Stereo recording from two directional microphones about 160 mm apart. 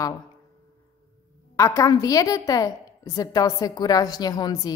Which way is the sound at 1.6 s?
20° left (ahead or behind).